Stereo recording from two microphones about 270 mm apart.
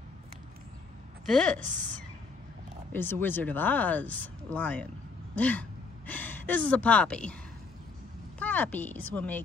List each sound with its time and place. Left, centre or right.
1.2 s a woman's voice: centre
1.6 s a woman's voice: right
2.9 s speech: centre
8.4 s a woman's voice: centre